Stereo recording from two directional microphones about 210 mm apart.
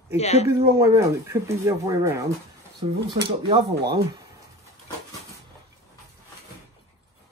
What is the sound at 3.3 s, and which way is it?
Speech, 25° right (ahead or behind).